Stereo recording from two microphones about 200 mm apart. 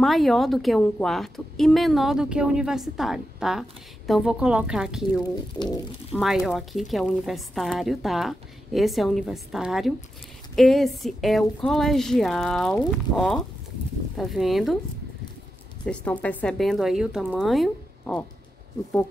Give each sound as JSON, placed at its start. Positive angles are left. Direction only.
{"t": 0.0, "sound": "a woman's voice", "side_deg": 0}
{"t": 5.5, "sound": "speech", "side_deg": 25}
{"t": 6.1, "sound": "a woman's voice", "side_deg": 0}
{"t": 15.8, "sound": "a woman's voice", "side_deg": 5}